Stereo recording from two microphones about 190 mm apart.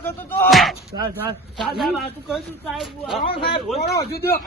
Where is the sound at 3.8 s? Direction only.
55° left (ahead or behind).